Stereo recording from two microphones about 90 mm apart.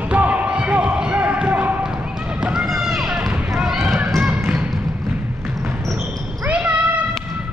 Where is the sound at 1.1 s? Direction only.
15° right (ahead or behind).